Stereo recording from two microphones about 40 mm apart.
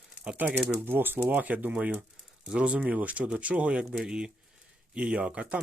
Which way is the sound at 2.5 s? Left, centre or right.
Right.